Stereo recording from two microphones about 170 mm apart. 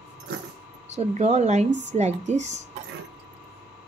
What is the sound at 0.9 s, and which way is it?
A woman's voice, 40° right (ahead or behind).